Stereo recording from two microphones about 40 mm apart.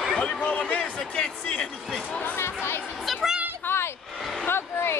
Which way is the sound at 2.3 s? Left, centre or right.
Left.